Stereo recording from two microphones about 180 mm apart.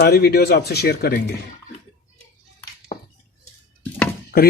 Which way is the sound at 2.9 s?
45° left (ahead or behind).